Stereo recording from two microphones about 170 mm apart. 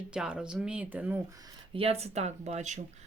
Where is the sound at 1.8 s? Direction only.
35° right (ahead or behind).